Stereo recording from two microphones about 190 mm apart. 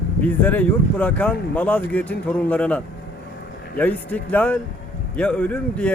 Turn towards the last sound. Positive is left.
turn(degrees=5)  # may be behind; listen again after turning